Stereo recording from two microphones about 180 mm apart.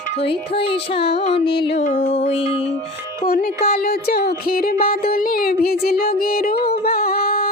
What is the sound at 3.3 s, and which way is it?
Music, 60° left (ahead or behind).